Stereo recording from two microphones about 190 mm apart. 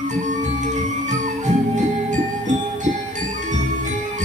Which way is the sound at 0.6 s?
40° right (ahead or behind).